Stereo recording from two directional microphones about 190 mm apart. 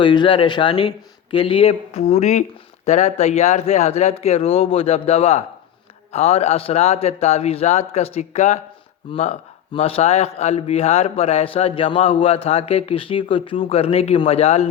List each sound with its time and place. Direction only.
0.0 s speech: 25° left (ahead or behind)